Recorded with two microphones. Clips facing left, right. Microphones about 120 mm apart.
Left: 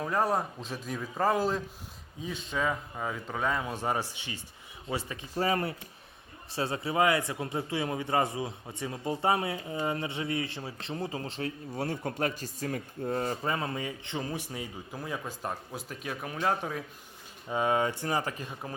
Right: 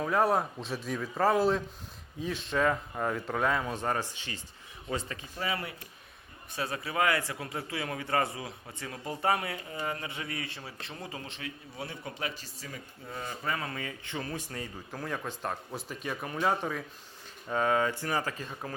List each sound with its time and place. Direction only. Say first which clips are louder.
0.0 s a man's voice: right 2 dB; centre (ahead or behind)
5.4 s speech: left 6 dB; 40° left (ahead or behind)
6.5 s a man's voice: left 3 dB; 25° left (ahead or behind); by 13.3 s 50° left (ahead or behind)
13.4 s a man's voice: left 3 dB; 25° left (ahead or behind); by 16.8 s 5° left (ahead or behind)
17.5 s a man's voice: even; 20° left (ahead or behind)